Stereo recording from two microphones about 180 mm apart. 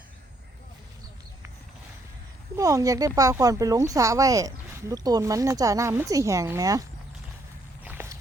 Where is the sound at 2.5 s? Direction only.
20° right (ahead or behind).